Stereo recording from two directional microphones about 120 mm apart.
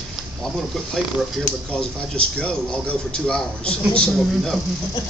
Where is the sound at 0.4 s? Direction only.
Centre (ahead or behind).